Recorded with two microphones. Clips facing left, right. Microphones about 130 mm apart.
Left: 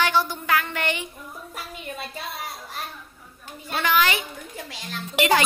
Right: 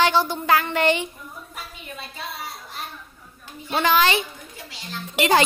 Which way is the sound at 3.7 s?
30° right (ahead or behind).